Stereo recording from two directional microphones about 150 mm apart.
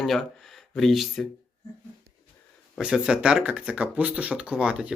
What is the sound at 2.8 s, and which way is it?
Speech, 5° right (ahead or behind).